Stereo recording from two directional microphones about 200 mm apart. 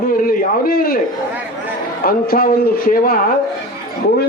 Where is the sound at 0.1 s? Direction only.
45° left (ahead or behind).